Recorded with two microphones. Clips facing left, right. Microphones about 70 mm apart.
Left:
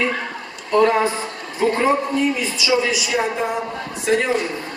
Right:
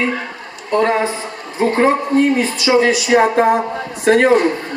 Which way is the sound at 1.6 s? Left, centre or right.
Right.